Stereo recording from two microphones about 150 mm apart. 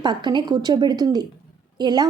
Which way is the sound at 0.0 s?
30° right (ahead or behind).